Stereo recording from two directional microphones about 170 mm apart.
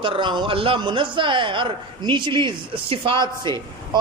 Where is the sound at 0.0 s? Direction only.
30° right (ahead or behind).